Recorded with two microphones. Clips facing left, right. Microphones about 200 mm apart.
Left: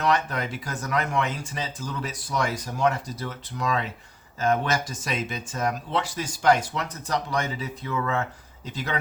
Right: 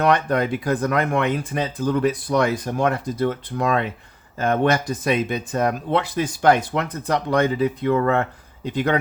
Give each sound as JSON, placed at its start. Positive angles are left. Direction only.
{"t": 0.0, "sound": "speech", "side_deg": -55}